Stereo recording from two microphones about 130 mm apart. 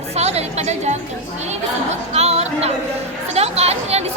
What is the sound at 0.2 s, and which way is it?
Music, 55° right (ahead or behind).